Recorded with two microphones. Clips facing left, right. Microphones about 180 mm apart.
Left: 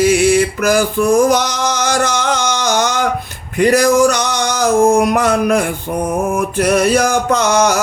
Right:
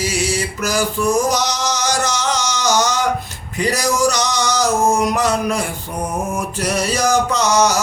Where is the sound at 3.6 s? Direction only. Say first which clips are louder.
Left 8 dB; 55° left (ahead or behind).